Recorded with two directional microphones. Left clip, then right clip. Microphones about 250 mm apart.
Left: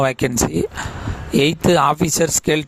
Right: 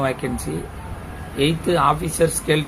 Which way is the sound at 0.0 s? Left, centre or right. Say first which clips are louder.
Left 5 dB; left.